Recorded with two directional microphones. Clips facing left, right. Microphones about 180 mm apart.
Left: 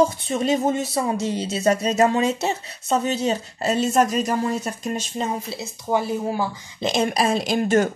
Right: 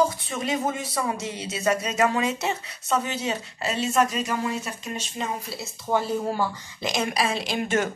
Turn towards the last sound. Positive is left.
turn(degrees=40)  # may be behind; listen again after turning